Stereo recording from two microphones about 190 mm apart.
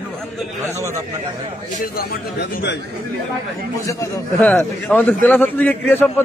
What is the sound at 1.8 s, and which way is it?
Speech, 55° left (ahead or behind).